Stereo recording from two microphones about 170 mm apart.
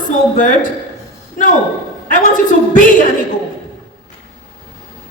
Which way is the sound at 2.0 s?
50° left (ahead or behind).